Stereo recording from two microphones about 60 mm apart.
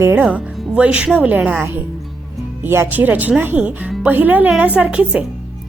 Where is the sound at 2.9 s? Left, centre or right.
Right.